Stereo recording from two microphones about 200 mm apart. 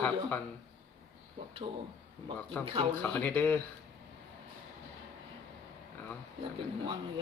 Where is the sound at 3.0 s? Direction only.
10° left (ahead or behind).